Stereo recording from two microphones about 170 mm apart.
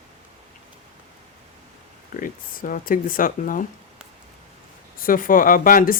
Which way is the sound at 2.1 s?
55° left (ahead or behind).